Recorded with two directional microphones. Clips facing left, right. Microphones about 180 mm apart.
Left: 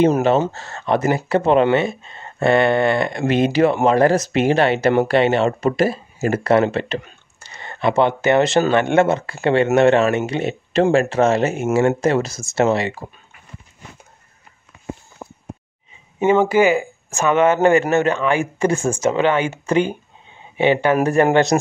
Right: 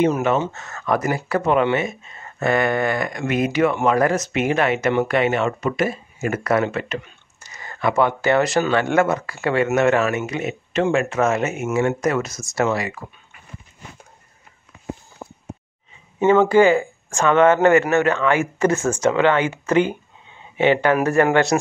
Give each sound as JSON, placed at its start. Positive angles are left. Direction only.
{"t": 0.0, "sound": "speech", "side_deg": 30}
{"t": 16.2, "sound": "speech", "side_deg": 15}